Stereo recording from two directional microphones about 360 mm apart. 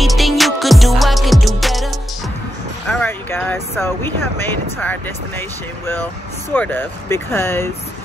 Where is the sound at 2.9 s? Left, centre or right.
Centre.